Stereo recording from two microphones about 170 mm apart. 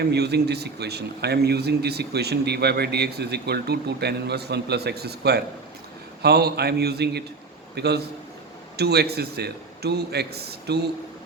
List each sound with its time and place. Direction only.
0.0 s a man's voice: 75° right (ahead or behind)